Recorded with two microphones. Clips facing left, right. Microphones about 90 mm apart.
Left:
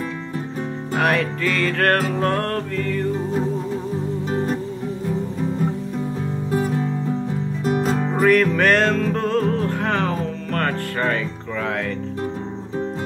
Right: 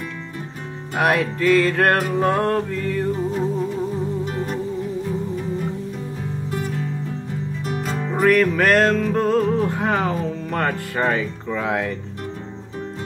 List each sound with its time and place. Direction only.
0.9 s music: 10° right (ahead or behind)
6.5 s music: 30° left (ahead or behind)
8.2 s music: centre (ahead or behind)